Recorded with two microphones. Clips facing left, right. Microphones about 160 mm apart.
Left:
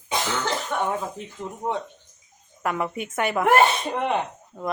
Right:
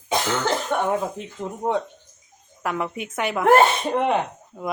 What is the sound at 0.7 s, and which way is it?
Speech, 30° right (ahead or behind).